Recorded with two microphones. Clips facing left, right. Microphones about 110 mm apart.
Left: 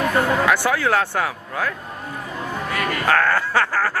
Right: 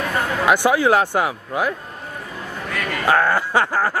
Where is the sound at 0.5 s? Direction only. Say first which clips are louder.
Right 3 dB; 15° right (ahead or behind).